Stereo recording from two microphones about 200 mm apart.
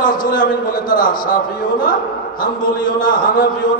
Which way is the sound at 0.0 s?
45° left (ahead or behind).